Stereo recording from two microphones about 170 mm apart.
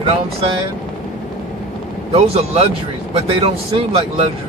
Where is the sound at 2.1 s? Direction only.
35° right (ahead or behind).